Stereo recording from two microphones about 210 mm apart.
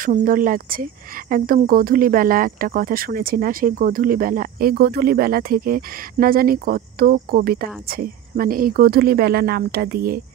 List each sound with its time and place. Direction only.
0.0 s speech: 40° right (ahead or behind)